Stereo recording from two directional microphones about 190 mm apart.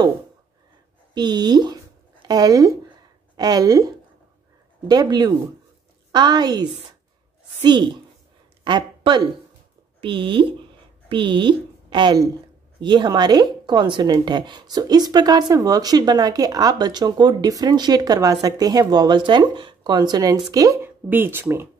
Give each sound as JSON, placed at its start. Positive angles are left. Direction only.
{"t": 1.1, "sound": "speech", "side_deg": -20}
{"t": 8.6, "sound": "a woman's voice", "side_deg": -25}